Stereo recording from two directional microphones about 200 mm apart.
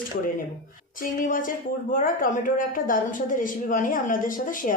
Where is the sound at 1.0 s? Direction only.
45° left (ahead or behind).